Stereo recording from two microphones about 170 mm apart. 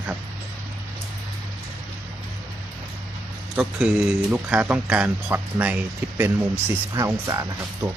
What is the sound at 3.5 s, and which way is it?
A man's voice, 5° right (ahead or behind).